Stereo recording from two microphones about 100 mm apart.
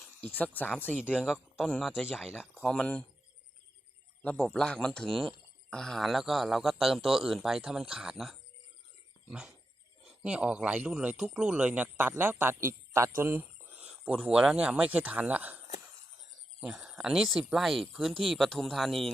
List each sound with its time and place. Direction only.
0.0 s speech: 15° left (ahead or behind)
1.1 s a man's voice: 10° right (ahead or behind)
2.6 s speech: 5° left (ahead or behind)
4.2 s a man's voice: 10° left (ahead or behind); by 15.6 s 15° right (ahead or behind)
16.6 s speech: 5° right (ahead or behind)